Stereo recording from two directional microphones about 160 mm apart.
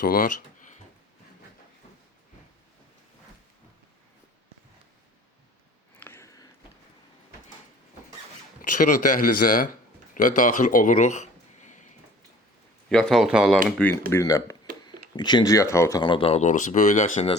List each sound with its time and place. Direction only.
0.0 s speech: 60° left (ahead or behind)
6.0 s a sound: 15° left (ahead or behind)
8.8 s speech: 55° left (ahead or behind)
12.9 s speech: 5° left (ahead or behind)
14.1 s speech: 20° left (ahead or behind); by 17.2 s 50° left (ahead or behind)